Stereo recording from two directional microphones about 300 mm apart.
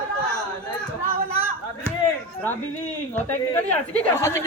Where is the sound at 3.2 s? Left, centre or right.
Centre.